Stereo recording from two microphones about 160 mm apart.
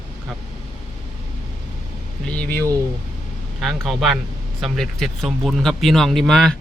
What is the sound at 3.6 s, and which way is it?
Speech, centre (ahead or behind).